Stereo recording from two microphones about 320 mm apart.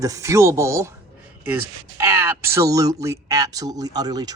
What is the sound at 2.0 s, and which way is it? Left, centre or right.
Speech, centre.